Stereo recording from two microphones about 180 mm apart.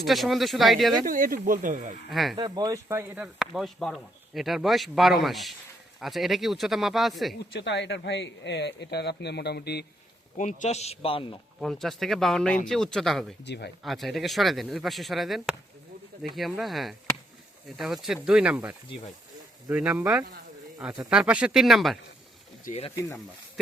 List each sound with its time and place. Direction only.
0.0 s speech: centre (ahead or behind)
1.0 s speech: 50° right (ahead or behind)
2.0 s speech: centre (ahead or behind)
2.3 s speech: 20° right (ahead or behind)
3.3 s speech: centre (ahead or behind)
7.5 s speech: 75° left (ahead or behind)
10.3 s a man's voice: 45° left (ahead or behind)
11.6 s speech: centre (ahead or behind)
13.4 s speech: 70° left (ahead or behind)
13.8 s speech: centre (ahead or behind)
22.7 s speech: 45° left (ahead or behind)